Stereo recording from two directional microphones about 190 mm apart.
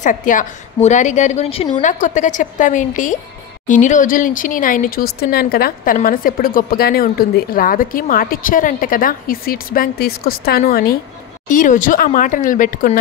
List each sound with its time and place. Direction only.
0.0 s a woman's voice: 45° left (ahead or behind)